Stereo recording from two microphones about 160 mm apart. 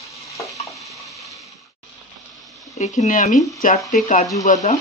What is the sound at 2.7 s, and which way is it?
Speech, 45° left (ahead or behind).